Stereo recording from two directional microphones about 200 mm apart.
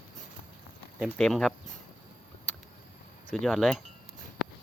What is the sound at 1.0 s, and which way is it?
Speech, 5° left (ahead or behind).